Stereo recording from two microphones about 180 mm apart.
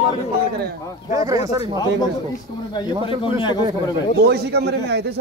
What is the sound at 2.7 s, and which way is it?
Speech, 25° left (ahead or behind).